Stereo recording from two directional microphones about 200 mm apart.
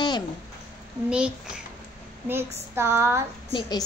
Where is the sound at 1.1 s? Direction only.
5° right (ahead or behind).